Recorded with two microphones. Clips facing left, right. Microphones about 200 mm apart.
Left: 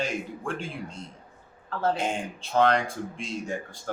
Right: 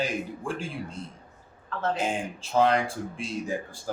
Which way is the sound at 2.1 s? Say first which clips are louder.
Right 1 dB; 5° right (ahead or behind).